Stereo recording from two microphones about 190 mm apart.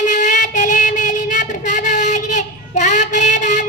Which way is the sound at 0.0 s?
40° left (ahead or behind).